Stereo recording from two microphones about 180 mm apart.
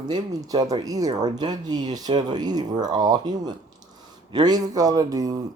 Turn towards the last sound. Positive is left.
turn(degrees=-20)  # may be behind; listen again after turning